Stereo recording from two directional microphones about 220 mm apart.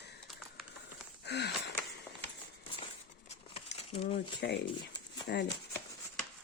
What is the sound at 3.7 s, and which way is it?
Crumpling, 25° left (ahead or behind).